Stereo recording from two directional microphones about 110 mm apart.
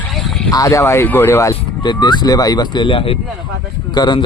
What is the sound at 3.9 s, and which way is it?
Speech, 40° left (ahead or behind).